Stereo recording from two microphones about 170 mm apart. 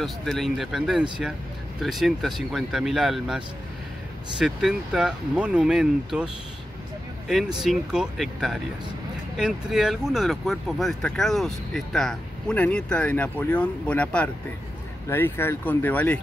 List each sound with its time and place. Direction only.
0.0 s speech: centre (ahead or behind)